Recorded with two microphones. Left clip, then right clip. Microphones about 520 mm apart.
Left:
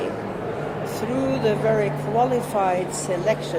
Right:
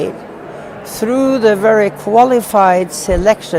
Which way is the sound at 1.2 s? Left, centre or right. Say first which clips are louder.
Right 11 dB; right.